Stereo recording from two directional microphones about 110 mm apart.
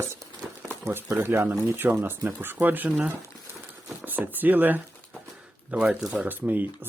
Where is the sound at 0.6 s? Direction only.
20° right (ahead or behind).